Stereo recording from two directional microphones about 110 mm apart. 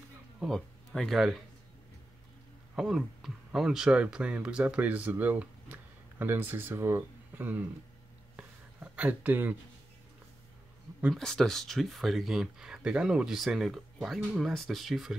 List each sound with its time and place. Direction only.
0.5 s speech: 5° left (ahead or behind)
2.7 s speech: 5° right (ahead or behind)
8.4 s a sound: 15° right (ahead or behind)
11.1 s speech: 5° left (ahead or behind)